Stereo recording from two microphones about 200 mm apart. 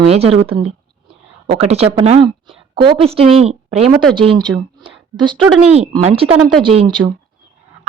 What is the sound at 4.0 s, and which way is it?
Speech, centre (ahead or behind).